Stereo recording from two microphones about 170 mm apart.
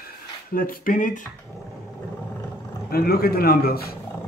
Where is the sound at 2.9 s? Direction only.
65° left (ahead or behind).